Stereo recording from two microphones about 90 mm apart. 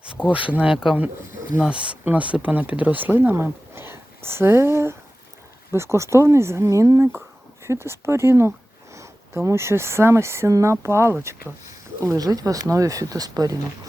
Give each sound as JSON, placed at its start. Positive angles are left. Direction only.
{"t": 0.2, "sound": "speech", "side_deg": 0}
{"t": 0.5, "sound": "speech", "side_deg": -10}
{"t": 12.0, "sound": "speech", "side_deg": -45}